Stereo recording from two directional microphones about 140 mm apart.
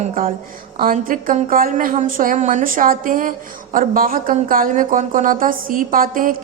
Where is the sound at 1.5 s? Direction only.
90° right.